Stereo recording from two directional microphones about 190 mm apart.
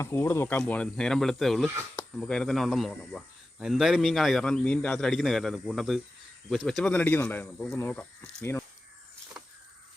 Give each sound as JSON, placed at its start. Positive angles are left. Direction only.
{"t": 0.0, "sound": "speech", "side_deg": 15}